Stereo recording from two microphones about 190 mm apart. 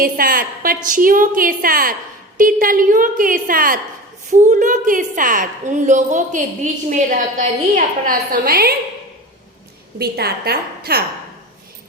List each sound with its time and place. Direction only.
0.0 s a woman's voice: 50° right (ahead or behind)
10.0 s a woman's voice: 55° right (ahead or behind)